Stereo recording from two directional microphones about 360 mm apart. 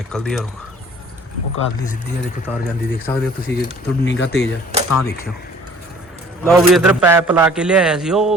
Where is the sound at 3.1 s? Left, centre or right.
Centre.